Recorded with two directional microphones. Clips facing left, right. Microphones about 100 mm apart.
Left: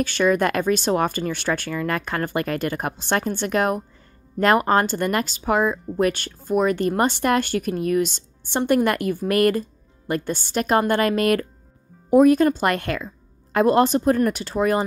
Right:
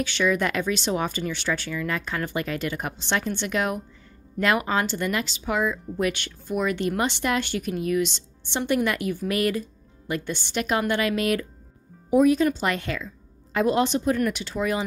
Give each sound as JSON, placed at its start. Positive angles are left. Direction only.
{"t": 0.0, "sound": "speech", "side_deg": 45}